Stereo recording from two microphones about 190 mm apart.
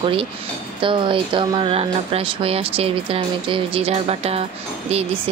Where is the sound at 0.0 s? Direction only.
30° right (ahead or behind).